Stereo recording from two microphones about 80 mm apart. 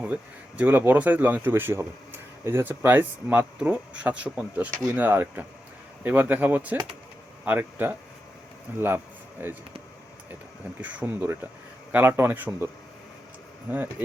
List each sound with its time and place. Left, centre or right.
0.0 s speech: centre
10.8 s speech: right